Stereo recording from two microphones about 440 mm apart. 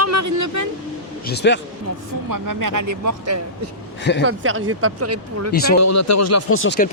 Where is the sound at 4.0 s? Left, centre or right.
Left.